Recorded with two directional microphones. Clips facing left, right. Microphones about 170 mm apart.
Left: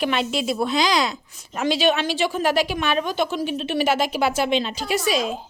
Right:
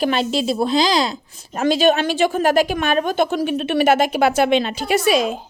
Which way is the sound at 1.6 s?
45° right (ahead or behind).